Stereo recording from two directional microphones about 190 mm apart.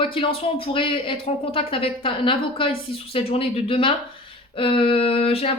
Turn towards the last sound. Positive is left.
turn(degrees=30)  # may be behind; listen again after turning